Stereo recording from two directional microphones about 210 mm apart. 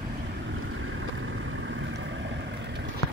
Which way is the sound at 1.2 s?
70° right (ahead or behind).